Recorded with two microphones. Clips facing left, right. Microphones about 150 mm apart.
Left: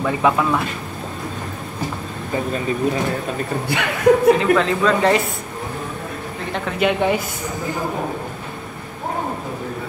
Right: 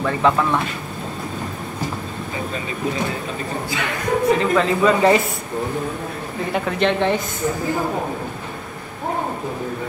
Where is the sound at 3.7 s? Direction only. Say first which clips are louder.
Left 4 dB; 65° left (ahead or behind).